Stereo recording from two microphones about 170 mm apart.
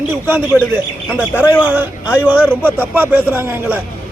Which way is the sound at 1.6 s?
10° right (ahead or behind).